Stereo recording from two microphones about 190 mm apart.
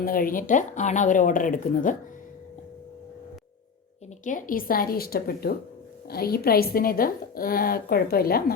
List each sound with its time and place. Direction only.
0.0 s a woman's voice: 50° left (ahead or behind)
4.2 s a woman's voice: 45° left (ahead or behind)